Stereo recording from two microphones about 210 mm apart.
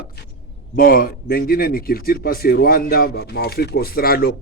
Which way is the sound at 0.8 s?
45° left (ahead or behind).